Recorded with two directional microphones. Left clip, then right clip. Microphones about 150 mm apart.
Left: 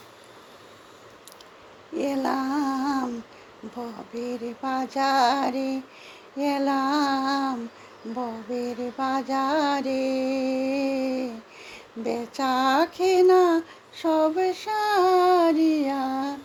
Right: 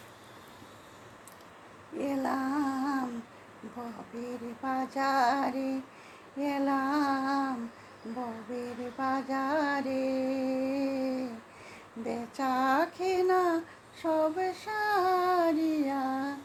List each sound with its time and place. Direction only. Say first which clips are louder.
2.0 s a sound: left 6 dB; 40° left (ahead or behind)
4.1 s female singing: left 10 dB; 40° left (ahead or behind)
8.5 s female singing: left 8 dB; 40° left (ahead or behind)